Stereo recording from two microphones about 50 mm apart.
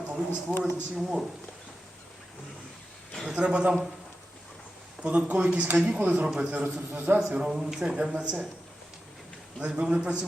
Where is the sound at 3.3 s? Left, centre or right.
Right.